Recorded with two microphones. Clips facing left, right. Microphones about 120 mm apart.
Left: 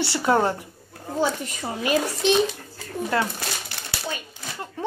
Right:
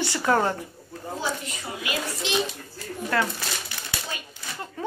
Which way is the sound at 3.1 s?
20° left (ahead or behind).